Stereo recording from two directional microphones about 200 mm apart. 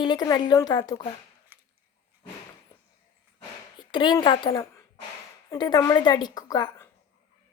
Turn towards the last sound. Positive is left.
turn(degrees=15)  # may be behind; listen again after turning